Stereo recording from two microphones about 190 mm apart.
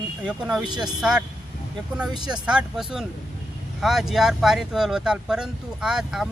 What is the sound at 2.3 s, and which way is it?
Speech, 5° right (ahead or behind).